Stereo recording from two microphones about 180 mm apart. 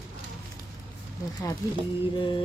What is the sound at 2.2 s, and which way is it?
Music, 25° left (ahead or behind).